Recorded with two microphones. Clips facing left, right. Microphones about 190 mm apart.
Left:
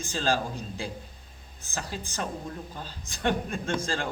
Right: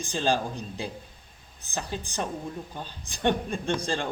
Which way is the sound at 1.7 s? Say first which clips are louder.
Right 2 dB; 15° right (ahead or behind).